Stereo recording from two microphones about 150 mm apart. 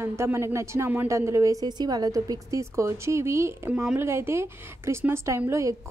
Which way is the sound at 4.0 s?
15° right (ahead or behind).